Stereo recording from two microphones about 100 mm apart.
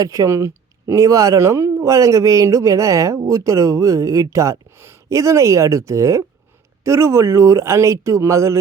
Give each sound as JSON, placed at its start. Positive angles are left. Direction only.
{"t": 0.0, "sound": "speech", "side_deg": -35}